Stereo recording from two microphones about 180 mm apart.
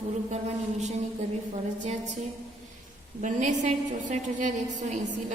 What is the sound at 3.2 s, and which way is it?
A woman's voice, 45° right (ahead or behind).